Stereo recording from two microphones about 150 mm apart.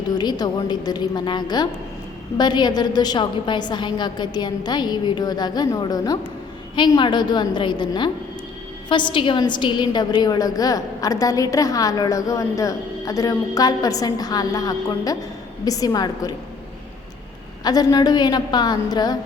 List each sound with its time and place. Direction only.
0.2 s a woman's voice: 30° left (ahead or behind)
17.6 s a woman's voice: 25° left (ahead or behind)